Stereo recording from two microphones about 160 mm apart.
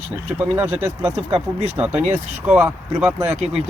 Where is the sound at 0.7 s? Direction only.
45° right (ahead or behind).